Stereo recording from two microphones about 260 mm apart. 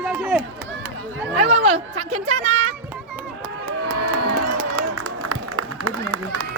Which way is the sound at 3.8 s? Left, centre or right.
Right.